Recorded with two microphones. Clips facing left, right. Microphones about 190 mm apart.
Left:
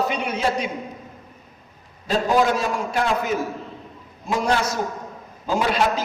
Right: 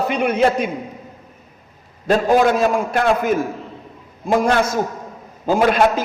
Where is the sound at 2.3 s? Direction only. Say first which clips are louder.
Right 4 dB; 55° right (ahead or behind).